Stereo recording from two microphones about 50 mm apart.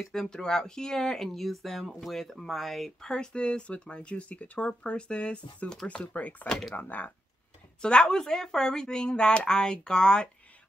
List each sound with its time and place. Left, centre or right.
0.1 s speech: centre
3.1 s speech: centre
6.1 s speech: left
7.8 s speech: centre